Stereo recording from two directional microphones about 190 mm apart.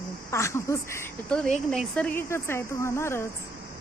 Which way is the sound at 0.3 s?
15° left (ahead or behind).